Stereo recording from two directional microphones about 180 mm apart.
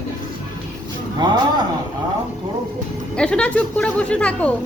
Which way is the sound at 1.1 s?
25° right (ahead or behind).